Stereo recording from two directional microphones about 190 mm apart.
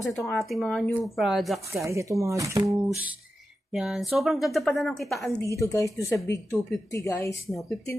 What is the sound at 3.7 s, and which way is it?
Speech, centre (ahead or behind).